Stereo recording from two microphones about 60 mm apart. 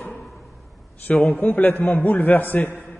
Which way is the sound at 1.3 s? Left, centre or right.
Left.